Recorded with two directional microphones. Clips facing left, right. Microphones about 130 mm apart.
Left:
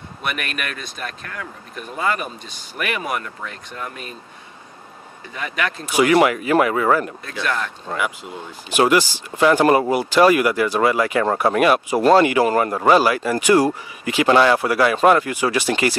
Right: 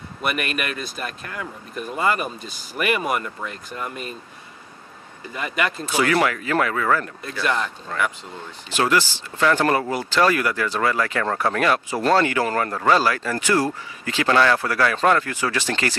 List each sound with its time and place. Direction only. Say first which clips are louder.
0.2 s speech: right 2 dB; centre (ahead or behind)
5.2 s speech: even; centre (ahead or behind)
5.9 s speech: left 6 dB; 15° left (ahead or behind)
7.2 s speech: even; 5° right (ahead or behind)
7.9 s speech: left 2 dB; 15° left (ahead or behind)